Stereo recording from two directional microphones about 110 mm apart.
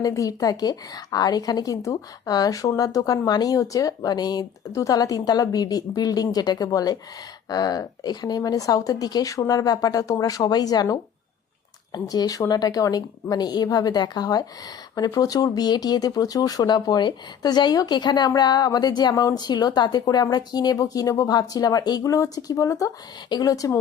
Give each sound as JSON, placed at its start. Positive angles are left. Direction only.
{"t": 0.0, "sound": "a woman's voice", "side_deg": 30}